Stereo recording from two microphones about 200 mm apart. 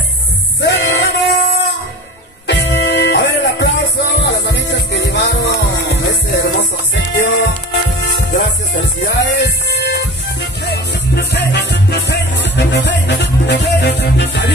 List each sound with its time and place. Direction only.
0.6 s music: 60° left (ahead or behind)
2.4 s music: 60° left (ahead or behind)